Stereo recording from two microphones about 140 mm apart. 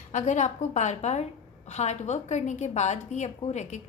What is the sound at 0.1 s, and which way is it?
A woman's voice, 60° left (ahead or behind).